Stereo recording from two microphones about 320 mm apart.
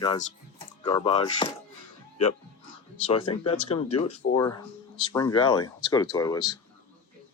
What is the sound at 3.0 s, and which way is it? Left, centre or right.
Speech, centre.